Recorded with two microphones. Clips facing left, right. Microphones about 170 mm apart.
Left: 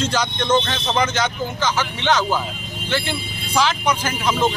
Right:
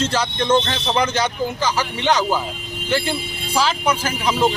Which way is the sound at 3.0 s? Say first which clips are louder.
Right 2 dB; 5° right (ahead or behind).